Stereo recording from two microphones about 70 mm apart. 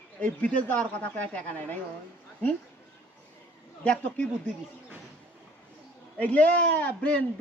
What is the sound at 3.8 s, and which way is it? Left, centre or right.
Speech, left.